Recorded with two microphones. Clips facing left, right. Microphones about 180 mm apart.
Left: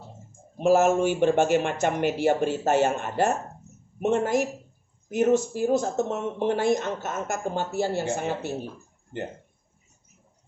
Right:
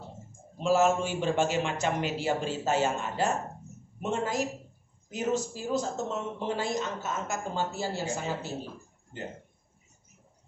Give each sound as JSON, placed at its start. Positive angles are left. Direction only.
{"t": 0.6, "sound": "speech", "side_deg": 55}
{"t": 5.5, "sound": "speech", "side_deg": 60}